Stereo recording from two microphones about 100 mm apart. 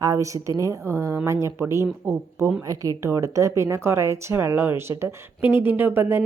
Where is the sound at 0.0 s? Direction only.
35° right (ahead or behind).